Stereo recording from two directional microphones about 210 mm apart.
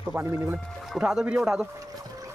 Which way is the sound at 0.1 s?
10° right (ahead or behind).